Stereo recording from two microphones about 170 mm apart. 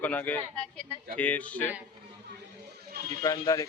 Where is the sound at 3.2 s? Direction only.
20° left (ahead or behind).